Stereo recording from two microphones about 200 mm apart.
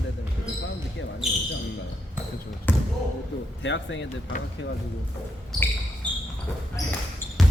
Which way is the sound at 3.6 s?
65° left (ahead or behind).